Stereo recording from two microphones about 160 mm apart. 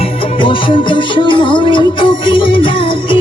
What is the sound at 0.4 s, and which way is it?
Music, 30° left (ahead or behind).